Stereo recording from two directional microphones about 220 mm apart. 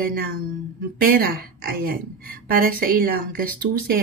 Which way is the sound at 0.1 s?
45° right (ahead or behind).